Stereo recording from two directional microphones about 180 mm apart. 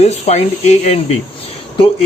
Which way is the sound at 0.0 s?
35° left (ahead or behind).